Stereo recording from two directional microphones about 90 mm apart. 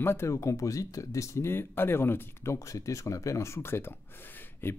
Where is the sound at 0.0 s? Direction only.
25° left (ahead or behind).